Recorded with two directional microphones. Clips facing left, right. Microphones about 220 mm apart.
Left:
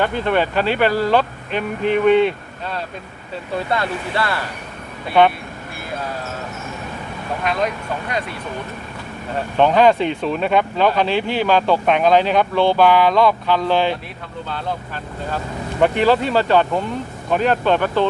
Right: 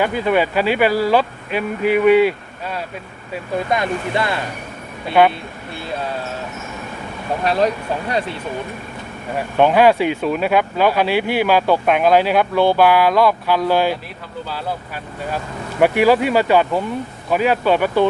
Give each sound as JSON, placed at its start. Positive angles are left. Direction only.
{"t": 0.0, "sound": "speech", "side_deg": -10}
{"t": 5.2, "sound": "speech", "side_deg": -5}
{"t": 7.4, "sound": "speech", "side_deg": -35}
{"t": 9.3, "sound": "speech", "side_deg": -10}
{"t": 15.8, "sound": "speech", "side_deg": -10}